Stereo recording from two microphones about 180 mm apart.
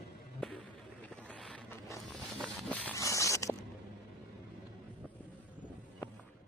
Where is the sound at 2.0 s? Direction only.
Centre (ahead or behind).